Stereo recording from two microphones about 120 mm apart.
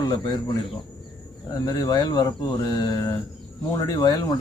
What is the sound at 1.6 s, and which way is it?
Speech, 30° left (ahead or behind).